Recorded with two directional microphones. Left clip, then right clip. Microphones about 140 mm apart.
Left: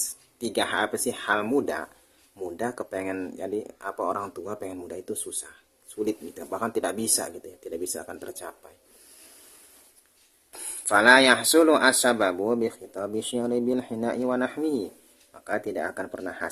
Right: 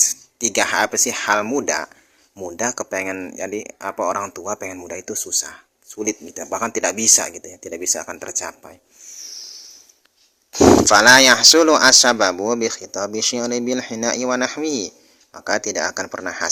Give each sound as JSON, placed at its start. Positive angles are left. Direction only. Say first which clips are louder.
{"t": 0.3, "sound": "speech", "louder": "right 7 dB", "side_deg": -25}
{"t": 10.8, "sound": "speech", "louder": "right 2 dB", "side_deg": -35}